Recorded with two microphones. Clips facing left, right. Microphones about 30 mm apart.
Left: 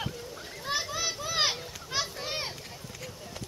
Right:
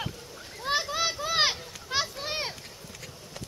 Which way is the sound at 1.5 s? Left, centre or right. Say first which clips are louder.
Even; centre.